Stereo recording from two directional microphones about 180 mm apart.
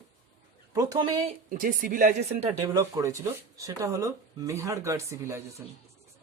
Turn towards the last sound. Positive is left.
turn(degrees=-15)  # may be behind; listen again after turning